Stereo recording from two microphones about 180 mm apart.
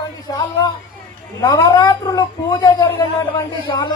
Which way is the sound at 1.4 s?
20° left (ahead or behind).